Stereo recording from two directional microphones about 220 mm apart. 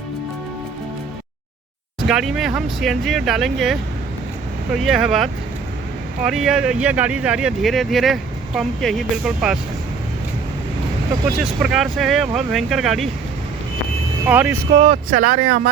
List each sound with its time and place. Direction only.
2.0 s speech: centre (ahead or behind)
11.3 s speech: centre (ahead or behind)
14.3 s speech: 10° right (ahead or behind)
14.7 s speech: 25° right (ahead or behind)